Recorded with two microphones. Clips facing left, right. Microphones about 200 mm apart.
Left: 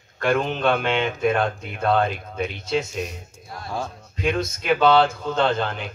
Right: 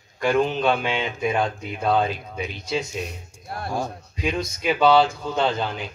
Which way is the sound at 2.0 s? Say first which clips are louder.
Left 2 dB; 55° left (ahead or behind).